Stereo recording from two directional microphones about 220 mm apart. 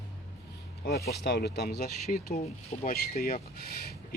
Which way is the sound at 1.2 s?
50° left (ahead or behind).